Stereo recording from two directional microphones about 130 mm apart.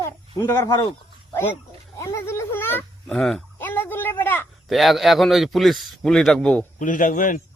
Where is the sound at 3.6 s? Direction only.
15° left (ahead or behind).